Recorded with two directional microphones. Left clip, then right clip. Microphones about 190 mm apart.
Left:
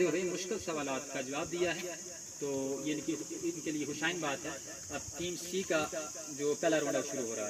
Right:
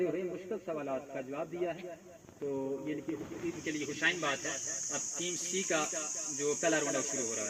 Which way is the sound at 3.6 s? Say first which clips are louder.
Right 5 dB; 45° left (ahead or behind).